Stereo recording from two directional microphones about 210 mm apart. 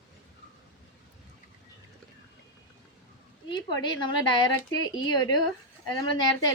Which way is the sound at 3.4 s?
20° left (ahead or behind).